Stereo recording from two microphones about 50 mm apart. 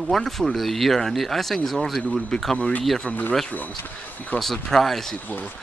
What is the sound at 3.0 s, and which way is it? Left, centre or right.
Speech, left.